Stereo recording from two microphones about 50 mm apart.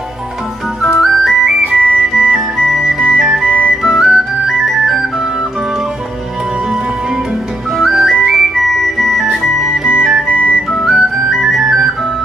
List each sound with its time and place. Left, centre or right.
0.9 s music: centre
1.7 s music: centre
2.3 s organ: centre
3.7 s music: centre
7.7 s music: centre